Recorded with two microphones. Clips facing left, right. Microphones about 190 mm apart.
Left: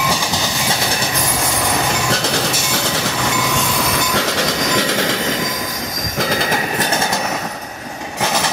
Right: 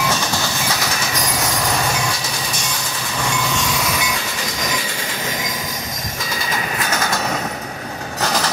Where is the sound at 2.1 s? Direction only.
75° left (ahead or behind).